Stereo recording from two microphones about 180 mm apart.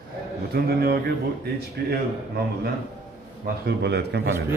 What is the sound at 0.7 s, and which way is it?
Speech, 60° right (ahead or behind).